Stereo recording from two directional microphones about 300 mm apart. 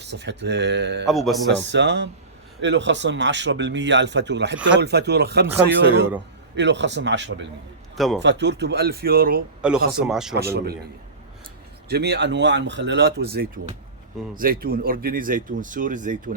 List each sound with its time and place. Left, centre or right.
0.0 s speech: right
1.0 s a man's voice: centre
1.5 s speech: right
6.6 s speech: right
7.9 s a man's voice: centre
8.2 s speech: right
9.6 s a man's voice: centre
10.3 s speech: right
11.9 s speech: right